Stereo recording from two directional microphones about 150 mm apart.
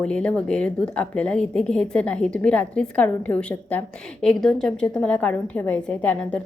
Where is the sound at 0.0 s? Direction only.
5° left (ahead or behind).